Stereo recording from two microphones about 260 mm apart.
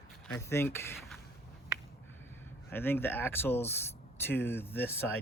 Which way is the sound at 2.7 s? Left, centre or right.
Centre.